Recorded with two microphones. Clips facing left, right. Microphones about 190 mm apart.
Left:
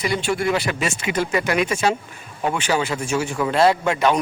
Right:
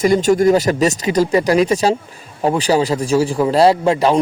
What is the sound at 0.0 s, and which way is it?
Speech, 40° right (ahead or behind).